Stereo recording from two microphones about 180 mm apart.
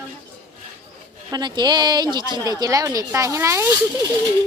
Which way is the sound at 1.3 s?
25° right (ahead or behind).